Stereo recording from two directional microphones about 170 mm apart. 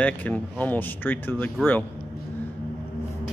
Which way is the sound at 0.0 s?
10° left (ahead or behind).